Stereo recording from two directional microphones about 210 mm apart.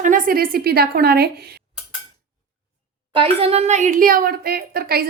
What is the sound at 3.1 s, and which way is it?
A woman's voice, 25° right (ahead or behind).